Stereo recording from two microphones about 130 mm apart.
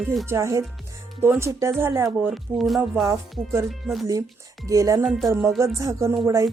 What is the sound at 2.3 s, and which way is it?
Speech, centre (ahead or behind).